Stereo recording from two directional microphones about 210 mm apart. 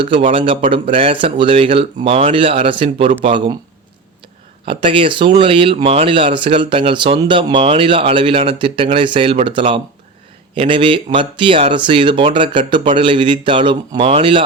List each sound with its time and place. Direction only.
0.0 s speech: 25° right (ahead or behind)
4.6 s speech: 25° right (ahead or behind)